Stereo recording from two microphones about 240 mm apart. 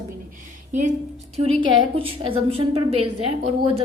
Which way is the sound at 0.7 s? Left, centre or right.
Right.